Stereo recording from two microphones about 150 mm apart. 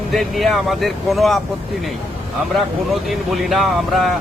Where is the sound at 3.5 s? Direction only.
Centre (ahead or behind).